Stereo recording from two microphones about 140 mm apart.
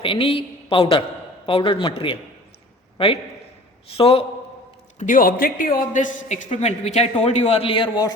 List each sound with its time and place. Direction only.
0.0 s a man's voice: 40° left (ahead or behind)
3.9 s a man's voice: 40° left (ahead or behind)
4.9 s a man's voice: 70° left (ahead or behind); by 8.1 s 30° left (ahead or behind)